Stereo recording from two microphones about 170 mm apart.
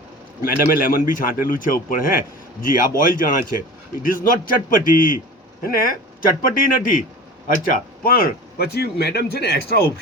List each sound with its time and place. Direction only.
0.4 s a man's voice: 55° left (ahead or behind)
8.0 s speech: 60° left (ahead or behind)